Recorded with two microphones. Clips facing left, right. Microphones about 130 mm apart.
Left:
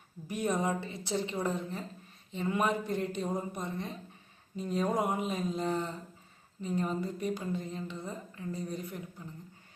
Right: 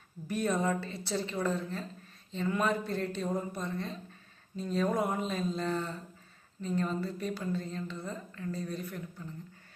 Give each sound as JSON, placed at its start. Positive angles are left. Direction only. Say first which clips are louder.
{"t": 0.3, "sound": "a woman's voice", "louder": "right 1 dB", "side_deg": 15}